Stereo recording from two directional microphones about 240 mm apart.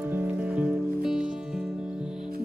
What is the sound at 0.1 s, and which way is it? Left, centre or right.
Music, centre.